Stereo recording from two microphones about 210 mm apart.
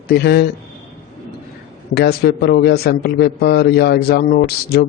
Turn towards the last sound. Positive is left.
turn(degrees=50)  # may be behind; listen again after turning